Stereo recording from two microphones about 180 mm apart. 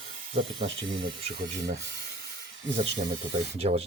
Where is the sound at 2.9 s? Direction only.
35° right (ahead or behind).